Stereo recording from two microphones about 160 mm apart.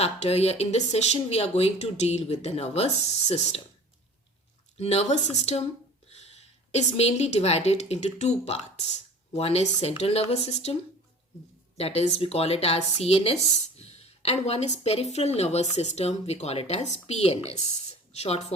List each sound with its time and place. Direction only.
0.0 s speech: 40° left (ahead or behind)
4.8 s a woman's voice: 40° left (ahead or behind)
11.8 s speech: 40° left (ahead or behind)